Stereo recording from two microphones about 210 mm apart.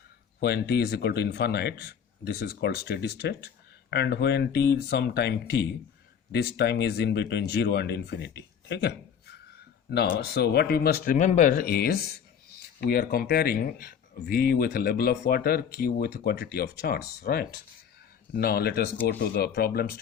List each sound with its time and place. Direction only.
0.3 s speech: 50° left (ahead or behind)